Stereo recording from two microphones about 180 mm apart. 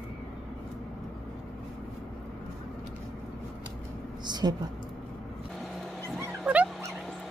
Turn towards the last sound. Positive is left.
turn(degrees=-5)  # may be behind; listen again after turning